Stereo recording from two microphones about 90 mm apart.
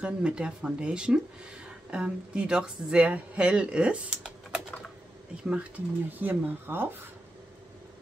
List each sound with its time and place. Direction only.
0.0 s speech: 10° right (ahead or behind)
6.1 s speech: 20° right (ahead or behind)